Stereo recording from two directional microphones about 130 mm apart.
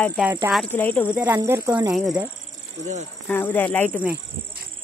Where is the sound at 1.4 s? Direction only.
25° right (ahead or behind).